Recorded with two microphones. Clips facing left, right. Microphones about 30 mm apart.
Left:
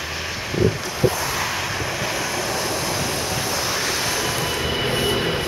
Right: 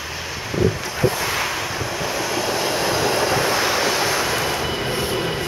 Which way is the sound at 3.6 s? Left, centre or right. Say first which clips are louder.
Right 4 dB; right.